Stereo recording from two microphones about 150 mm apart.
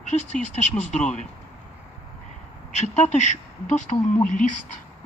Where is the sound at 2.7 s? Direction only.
50° left (ahead or behind).